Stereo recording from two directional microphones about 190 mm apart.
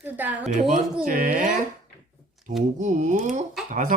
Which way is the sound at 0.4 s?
40° right (ahead or behind).